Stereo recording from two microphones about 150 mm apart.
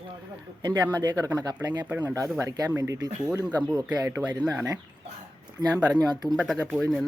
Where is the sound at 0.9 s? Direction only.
25° right (ahead or behind).